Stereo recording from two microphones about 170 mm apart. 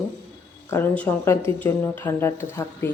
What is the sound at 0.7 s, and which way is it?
Speech, 10° left (ahead or behind).